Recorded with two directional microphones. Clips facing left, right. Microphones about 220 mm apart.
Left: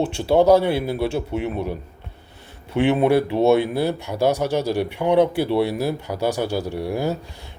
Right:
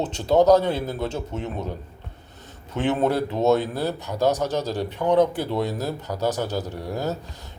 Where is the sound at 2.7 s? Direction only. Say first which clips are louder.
Left 5 dB; 10° left (ahead or behind).